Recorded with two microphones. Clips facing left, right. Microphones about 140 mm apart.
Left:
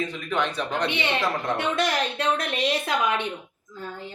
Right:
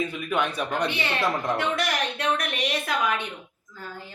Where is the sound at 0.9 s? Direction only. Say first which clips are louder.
Left 1 dB; 20° left (ahead or behind).